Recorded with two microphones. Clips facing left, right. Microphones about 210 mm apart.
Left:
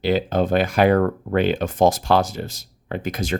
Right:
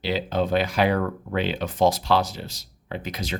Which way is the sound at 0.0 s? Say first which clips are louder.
Left 5 dB; 50° left (ahead or behind).